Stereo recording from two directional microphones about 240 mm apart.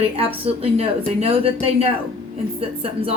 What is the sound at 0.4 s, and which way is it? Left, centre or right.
Speech, right.